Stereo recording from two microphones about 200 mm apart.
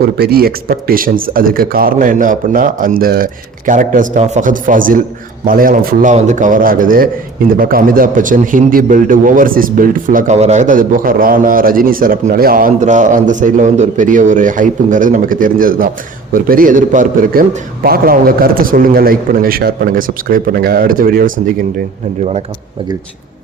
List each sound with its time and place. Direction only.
0.2 s a man's voice: 50° right (ahead or behind)